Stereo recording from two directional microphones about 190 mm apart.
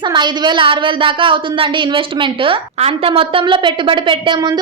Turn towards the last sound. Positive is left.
turn(degrees=-25)  # may be behind; listen again after turning